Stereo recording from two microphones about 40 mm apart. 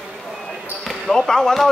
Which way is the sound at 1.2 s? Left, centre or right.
Centre.